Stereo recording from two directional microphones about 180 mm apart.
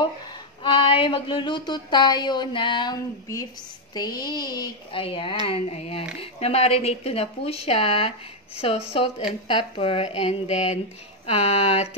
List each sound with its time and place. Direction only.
0.7 s speech: 30° left (ahead or behind)